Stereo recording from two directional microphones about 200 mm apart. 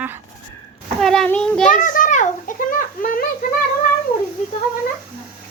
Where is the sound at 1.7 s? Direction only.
40° left (ahead or behind).